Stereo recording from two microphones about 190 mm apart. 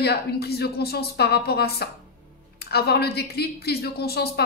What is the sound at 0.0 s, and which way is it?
Speech, 55° left (ahead or behind).